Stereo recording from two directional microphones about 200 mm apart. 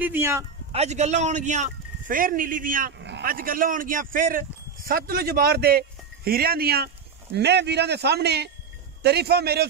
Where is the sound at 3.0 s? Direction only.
55° right (ahead or behind).